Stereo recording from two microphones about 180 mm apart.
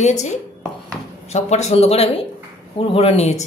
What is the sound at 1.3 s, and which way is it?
A woman's voice, 40° left (ahead or behind).